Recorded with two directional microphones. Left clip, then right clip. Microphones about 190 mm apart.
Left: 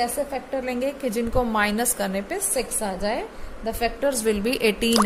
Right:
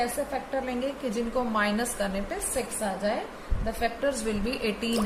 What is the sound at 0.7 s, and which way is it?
A woman's voice, 45° left (ahead or behind).